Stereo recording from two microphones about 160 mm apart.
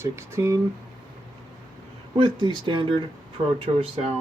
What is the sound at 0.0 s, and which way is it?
Speech, 15° right (ahead or behind).